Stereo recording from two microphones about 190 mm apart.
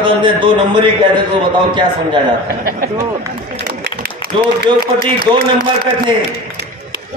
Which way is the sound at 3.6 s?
55° right (ahead or behind).